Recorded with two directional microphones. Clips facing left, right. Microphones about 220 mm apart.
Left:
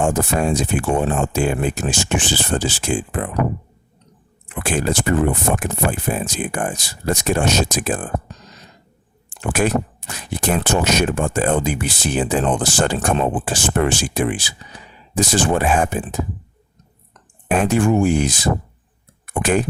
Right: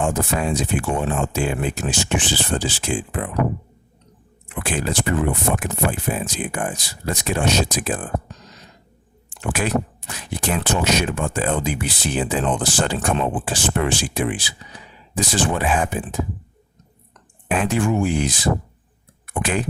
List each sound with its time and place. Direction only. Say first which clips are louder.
0.0 s speech: left 3 dB; 45° left (ahead or behind)
4.6 s speech: left 3 dB; 45° left (ahead or behind)
9.3 s speech: left 3 dB; 45° left (ahead or behind)
17.5 s speech: left 4 dB; 45° left (ahead or behind)